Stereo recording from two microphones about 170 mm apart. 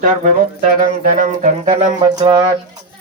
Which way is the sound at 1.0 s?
50° right (ahead or behind).